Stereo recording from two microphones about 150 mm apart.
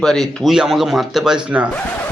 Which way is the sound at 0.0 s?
5° left (ahead or behind).